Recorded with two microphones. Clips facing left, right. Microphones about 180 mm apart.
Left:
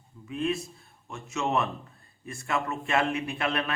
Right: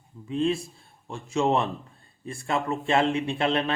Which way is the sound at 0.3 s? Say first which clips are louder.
Right 4 dB; 30° right (ahead or behind).